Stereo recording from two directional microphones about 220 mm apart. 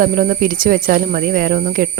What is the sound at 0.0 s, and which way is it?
Speech, 40° right (ahead or behind).